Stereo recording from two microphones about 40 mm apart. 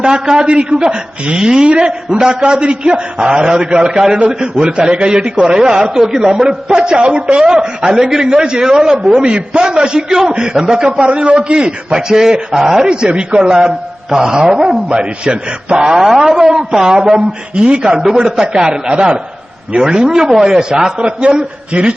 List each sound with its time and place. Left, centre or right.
0.0 s a man's voice: centre
9.2 s a man's voice: right
10.8 s a man's voice: right
14.8 s a man's voice: right
15.9 s a man's voice: centre
21.2 s a man's voice: right